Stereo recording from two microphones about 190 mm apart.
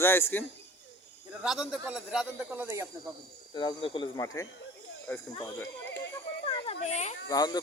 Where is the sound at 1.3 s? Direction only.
5° right (ahead or behind).